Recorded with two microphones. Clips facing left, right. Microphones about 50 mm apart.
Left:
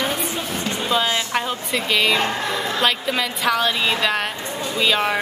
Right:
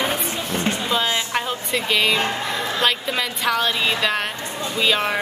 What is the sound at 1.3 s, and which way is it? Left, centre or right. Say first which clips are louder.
A woman's voice: left 1 dB; centre.